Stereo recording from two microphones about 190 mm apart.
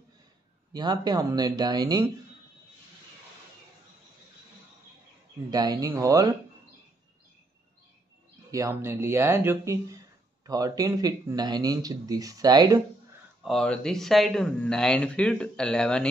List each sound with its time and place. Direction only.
0.7 s speech: 20° right (ahead or behind)
5.5 s speech: 20° right (ahead or behind)
8.5 s speech: 15° right (ahead or behind)
13.4 s speech: centre (ahead or behind)